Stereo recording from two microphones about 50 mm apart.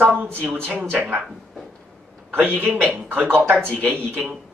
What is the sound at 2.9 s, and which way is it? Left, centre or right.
Speech, right.